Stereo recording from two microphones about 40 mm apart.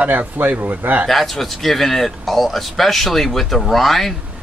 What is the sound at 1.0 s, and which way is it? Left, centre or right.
Speech, centre.